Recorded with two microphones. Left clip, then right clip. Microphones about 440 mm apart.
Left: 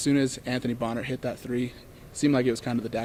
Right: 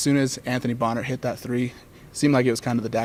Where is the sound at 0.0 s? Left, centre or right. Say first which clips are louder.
Right 3 dB; right.